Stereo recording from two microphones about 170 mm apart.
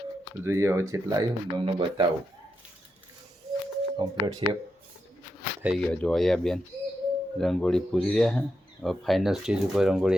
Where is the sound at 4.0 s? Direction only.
25° right (ahead or behind).